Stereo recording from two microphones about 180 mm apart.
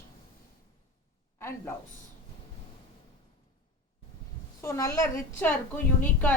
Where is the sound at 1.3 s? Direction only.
15° left (ahead or behind).